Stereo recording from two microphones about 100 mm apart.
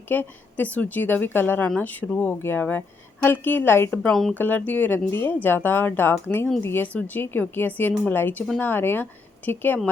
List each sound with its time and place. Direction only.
0.1 s speech: 20° left (ahead or behind)
4.0 s speech: 5° left (ahead or behind)
4.4 s speech: 15° left (ahead or behind)